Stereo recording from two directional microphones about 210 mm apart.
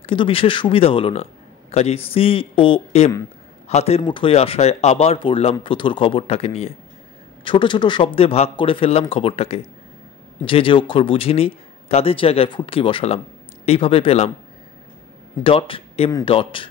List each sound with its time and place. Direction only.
0.0 s speech: 25° left (ahead or behind)
15.4 s speech: 25° left (ahead or behind)